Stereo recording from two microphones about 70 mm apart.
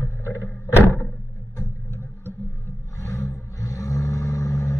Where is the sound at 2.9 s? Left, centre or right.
Left.